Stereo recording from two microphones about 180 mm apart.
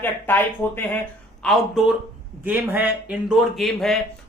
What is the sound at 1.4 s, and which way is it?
Speech, centre (ahead or behind).